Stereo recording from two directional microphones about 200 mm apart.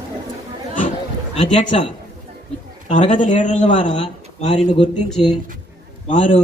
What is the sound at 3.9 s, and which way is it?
Speech, 25° left (ahead or behind).